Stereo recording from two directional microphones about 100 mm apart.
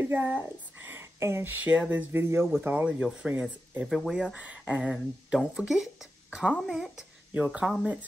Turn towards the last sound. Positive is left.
turn(degrees=-10)  # may be behind; listen again after turning